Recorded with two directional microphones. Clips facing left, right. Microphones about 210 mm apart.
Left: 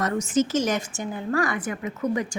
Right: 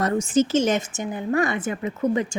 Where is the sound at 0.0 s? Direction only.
30° right (ahead or behind).